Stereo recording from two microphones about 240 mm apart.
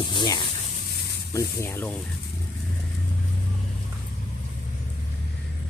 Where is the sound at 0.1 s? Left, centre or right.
Centre.